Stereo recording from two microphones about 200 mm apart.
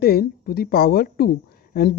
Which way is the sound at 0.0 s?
50° left (ahead or behind).